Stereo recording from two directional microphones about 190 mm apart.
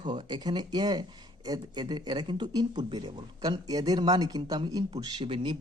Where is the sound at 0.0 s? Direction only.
25° right (ahead or behind).